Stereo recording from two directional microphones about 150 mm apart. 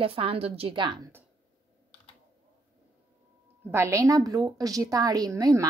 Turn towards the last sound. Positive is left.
turn(degrees=-20)  # may be behind; listen again after turning